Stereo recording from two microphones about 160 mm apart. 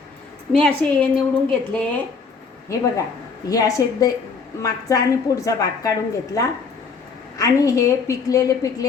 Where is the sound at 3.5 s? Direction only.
20° left (ahead or behind).